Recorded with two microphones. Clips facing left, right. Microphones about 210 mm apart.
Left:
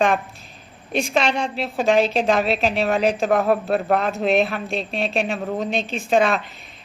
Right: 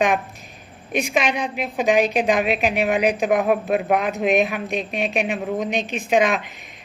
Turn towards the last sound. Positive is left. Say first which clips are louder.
# even
turn(degrees=-15)  # may be behind; listen again after turning